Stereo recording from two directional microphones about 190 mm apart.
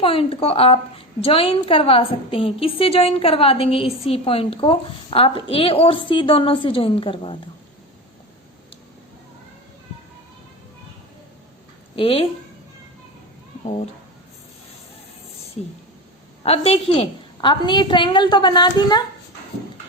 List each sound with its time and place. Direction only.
0.0 s a woman's voice: 30° left (ahead or behind)
11.9 s a woman's voice: 30° left (ahead or behind)
16.4 s a woman's voice: 30° left (ahead or behind)